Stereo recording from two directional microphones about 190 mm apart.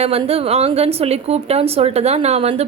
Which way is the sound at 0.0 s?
30° right (ahead or behind).